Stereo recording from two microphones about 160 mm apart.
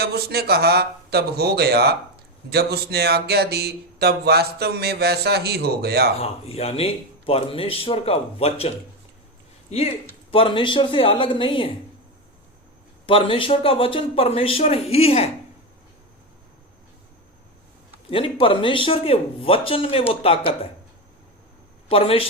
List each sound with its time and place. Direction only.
0.0 s speech: 80° right
6.1 s speech: 40° left (ahead or behind)
13.1 s speech: 35° left (ahead or behind)
18.1 s speech: 35° left (ahead or behind)
21.8 s speech: 35° left (ahead or behind)